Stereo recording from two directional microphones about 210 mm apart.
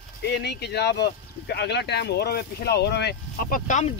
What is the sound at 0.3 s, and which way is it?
Speech, 55° left (ahead or behind).